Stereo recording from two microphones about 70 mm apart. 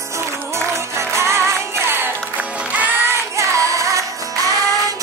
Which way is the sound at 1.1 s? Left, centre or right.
Right.